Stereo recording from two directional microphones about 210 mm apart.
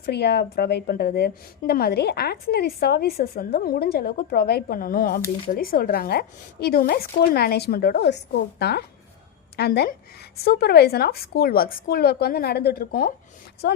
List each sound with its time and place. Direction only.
0.0 s a woman's voice: 50° left (ahead or behind)